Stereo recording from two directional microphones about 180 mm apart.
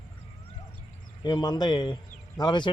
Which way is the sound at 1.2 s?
20° left (ahead or behind).